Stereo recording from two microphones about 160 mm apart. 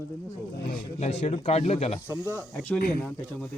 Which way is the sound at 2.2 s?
20° right (ahead or behind).